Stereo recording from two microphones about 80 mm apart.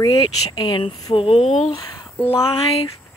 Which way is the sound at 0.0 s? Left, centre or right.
Left.